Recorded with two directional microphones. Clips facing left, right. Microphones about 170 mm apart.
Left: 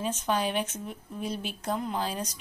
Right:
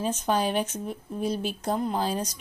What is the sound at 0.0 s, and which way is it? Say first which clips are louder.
Speech: right 3 dB; 35° right (ahead or behind).